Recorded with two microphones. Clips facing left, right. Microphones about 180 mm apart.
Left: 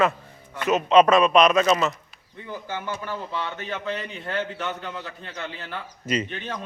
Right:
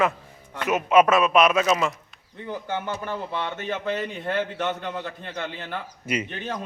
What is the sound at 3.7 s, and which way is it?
A man's voice, 50° right (ahead or behind).